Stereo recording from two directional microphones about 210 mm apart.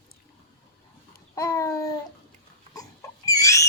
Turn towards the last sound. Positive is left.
turn(degrees=15)  # may be behind; listen again after turning